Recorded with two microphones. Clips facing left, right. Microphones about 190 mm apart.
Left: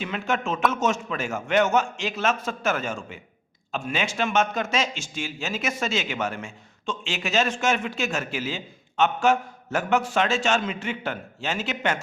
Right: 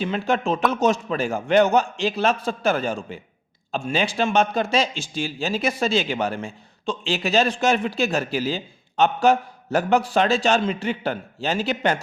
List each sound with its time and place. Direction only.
0.0 s a man's voice: 35° right (ahead or behind)